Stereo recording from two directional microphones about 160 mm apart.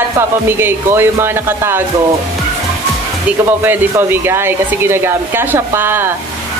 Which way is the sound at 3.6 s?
15° right (ahead or behind).